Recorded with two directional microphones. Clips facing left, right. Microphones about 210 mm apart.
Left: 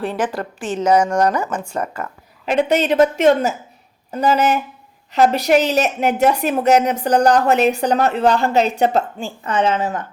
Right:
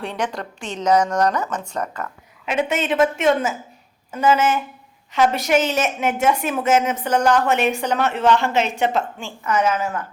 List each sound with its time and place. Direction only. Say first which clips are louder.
0.0 s speech: left 4 dB; 5° left (ahead or behind)
2.5 s a woman's voice: left 5 dB; 35° left (ahead or behind)